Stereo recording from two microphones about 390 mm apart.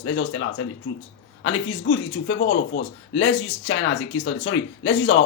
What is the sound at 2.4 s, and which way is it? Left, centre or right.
A man's voice, left.